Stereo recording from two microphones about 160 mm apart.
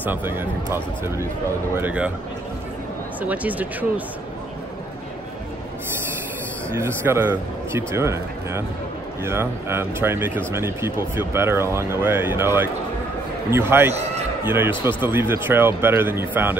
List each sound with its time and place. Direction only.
0.0 s speech: 10° right (ahead or behind)
3.2 s speech: 10° right (ahead or behind)
6.7 s speech: 15° right (ahead or behind)